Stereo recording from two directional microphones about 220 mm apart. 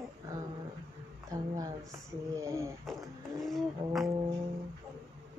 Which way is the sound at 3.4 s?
Centre (ahead or behind).